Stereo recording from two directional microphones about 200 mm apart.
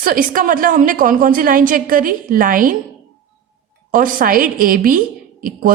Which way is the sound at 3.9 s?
45° right (ahead or behind).